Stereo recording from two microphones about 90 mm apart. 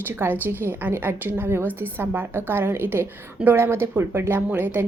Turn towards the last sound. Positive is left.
turn(degrees=-20)  # may be behind; listen again after turning